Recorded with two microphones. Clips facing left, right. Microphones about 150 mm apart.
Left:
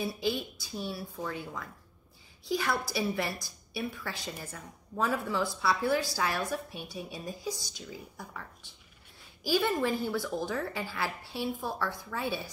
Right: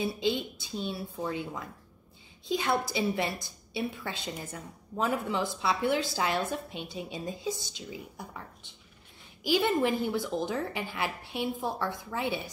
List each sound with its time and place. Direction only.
0.0 s a woman's voice: 20° right (ahead or behind)